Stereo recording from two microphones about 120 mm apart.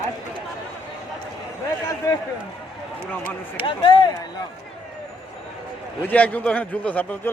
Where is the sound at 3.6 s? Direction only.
45° left (ahead or behind).